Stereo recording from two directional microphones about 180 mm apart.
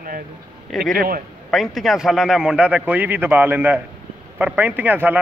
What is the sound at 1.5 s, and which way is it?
A man's voice, centre (ahead or behind).